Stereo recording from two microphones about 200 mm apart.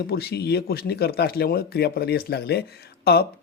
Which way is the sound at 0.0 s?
50° left (ahead or behind).